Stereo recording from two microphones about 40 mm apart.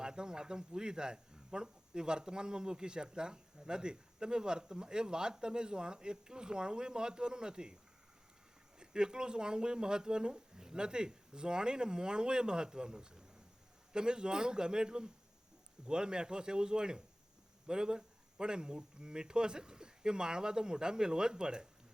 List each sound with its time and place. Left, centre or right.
0.0 s speech: centre
8.8 s speech: centre